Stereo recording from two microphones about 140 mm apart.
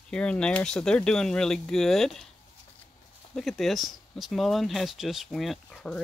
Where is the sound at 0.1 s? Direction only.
5° left (ahead or behind).